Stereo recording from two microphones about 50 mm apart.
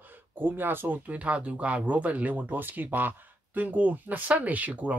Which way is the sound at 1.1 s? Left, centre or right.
Right.